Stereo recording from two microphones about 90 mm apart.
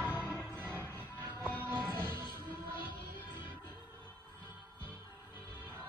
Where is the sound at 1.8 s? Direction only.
25° right (ahead or behind).